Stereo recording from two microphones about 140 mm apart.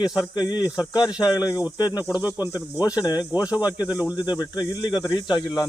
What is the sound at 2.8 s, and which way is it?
Speech, 25° left (ahead or behind).